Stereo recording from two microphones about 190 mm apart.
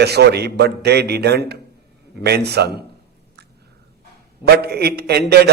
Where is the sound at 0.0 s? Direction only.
60° right (ahead or behind).